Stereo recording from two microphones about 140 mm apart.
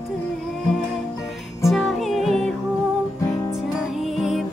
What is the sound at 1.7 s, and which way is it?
Music, centre (ahead or behind).